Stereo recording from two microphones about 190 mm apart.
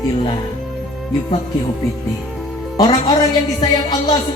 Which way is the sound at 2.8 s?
20° left (ahead or behind).